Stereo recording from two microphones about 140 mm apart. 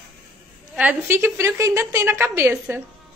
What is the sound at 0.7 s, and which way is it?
A woman's voice, 15° right (ahead or behind).